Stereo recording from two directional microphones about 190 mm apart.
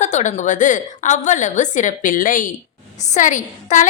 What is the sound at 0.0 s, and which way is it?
A woman's voice, 40° left (ahead or behind).